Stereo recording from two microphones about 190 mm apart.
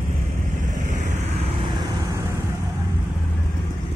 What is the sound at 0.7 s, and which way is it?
Vehicle, 40° right (ahead or behind).